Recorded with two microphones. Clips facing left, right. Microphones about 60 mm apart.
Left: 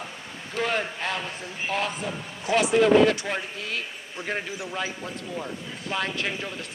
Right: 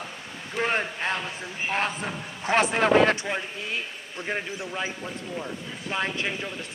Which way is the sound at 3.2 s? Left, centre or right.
Centre.